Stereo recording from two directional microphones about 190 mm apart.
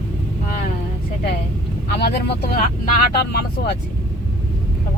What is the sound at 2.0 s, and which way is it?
Speech, 55° left (ahead or behind).